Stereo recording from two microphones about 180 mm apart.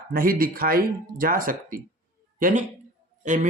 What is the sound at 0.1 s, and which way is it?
Speech, 55° right (ahead or behind).